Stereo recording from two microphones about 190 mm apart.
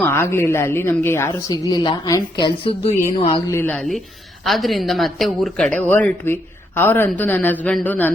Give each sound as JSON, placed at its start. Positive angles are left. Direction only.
{"t": 0.0, "sound": "a woman's voice", "side_deg": 15}
{"t": 3.5, "sound": "a woman's voice", "side_deg": 10}